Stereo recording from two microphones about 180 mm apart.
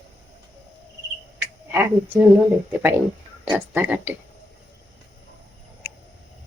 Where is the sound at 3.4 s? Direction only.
25° right (ahead or behind).